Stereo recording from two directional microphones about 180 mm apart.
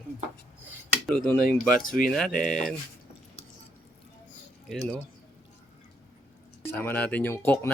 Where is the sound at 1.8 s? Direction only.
50° left (ahead or behind).